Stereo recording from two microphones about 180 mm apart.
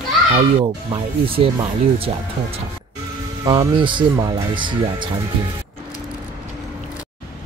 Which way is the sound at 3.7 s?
25° right (ahead or behind).